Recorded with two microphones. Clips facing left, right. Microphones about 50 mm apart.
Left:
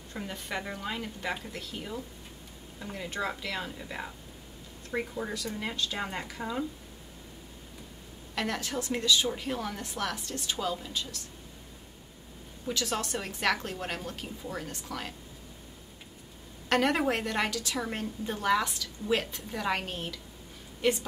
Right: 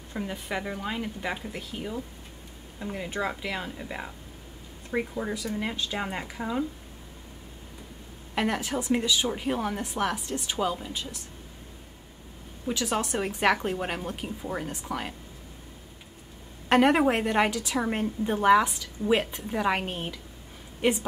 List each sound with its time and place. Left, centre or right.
0.1 s a woman's voice: centre
8.4 s a woman's voice: centre
12.6 s a woman's voice: centre
16.6 s a woman's voice: right